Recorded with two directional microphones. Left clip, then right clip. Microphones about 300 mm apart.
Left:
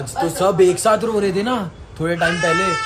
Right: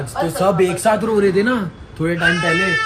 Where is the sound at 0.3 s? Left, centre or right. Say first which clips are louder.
Right 1 dB; centre.